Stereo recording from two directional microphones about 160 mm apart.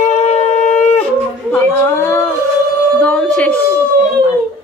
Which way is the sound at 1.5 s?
15° left (ahead or behind).